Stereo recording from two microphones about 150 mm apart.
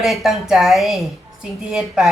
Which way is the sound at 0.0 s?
Centre (ahead or behind).